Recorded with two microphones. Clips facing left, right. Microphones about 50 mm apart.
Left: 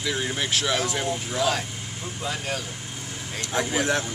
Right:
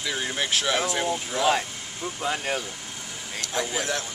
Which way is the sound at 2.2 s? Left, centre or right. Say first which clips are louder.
Right 2 dB; right.